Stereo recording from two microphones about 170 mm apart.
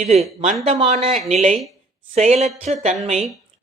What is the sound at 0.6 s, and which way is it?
A woman's voice, 40° right (ahead or behind).